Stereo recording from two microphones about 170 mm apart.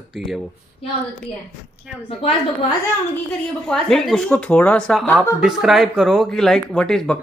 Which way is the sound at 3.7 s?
5° left (ahead or behind).